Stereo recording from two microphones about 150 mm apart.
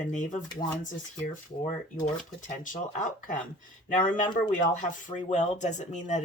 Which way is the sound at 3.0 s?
60° left (ahead or behind).